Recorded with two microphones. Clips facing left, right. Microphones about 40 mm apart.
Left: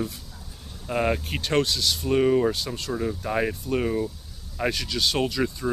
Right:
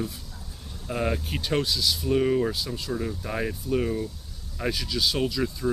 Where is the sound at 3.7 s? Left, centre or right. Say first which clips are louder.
Even; left.